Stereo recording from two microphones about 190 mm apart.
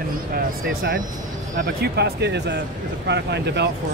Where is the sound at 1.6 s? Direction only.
55° right (ahead or behind).